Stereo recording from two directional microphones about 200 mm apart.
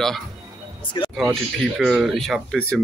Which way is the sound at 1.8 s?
Centre (ahead or behind).